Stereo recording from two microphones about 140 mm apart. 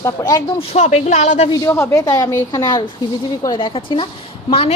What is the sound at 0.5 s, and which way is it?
Speech, 50° left (ahead or behind).